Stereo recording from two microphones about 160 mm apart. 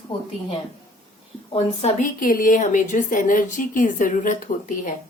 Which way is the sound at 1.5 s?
45° left (ahead or behind).